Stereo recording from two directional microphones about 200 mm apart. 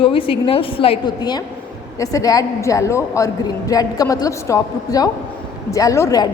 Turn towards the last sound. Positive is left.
turn(degrees=20)  # may be behind; listen again after turning